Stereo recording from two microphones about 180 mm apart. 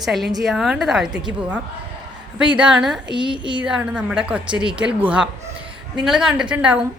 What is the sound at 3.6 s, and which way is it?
Speech, 5° right (ahead or behind).